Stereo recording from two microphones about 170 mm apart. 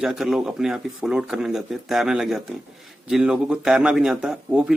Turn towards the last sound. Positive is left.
turn(degrees=-5)  # may be behind; listen again after turning